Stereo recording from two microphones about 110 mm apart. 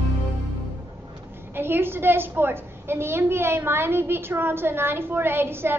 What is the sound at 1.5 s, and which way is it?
A woman's voice, 20° right (ahead or behind).